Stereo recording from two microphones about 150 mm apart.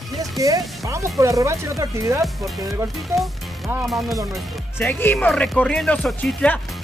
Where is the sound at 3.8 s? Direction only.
Centre (ahead or behind).